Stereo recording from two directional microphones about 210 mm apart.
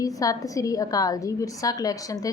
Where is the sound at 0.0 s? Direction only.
15° left (ahead or behind).